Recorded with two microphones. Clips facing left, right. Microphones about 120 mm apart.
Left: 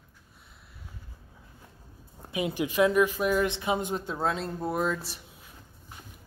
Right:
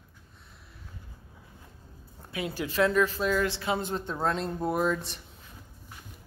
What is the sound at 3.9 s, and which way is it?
Speech, 5° left (ahead or behind).